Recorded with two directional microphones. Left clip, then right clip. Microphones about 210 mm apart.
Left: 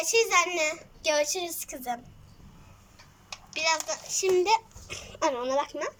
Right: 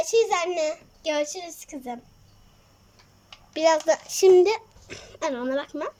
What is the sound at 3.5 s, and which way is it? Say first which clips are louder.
A child's voice: right 8 dB; 35° right (ahead or behind).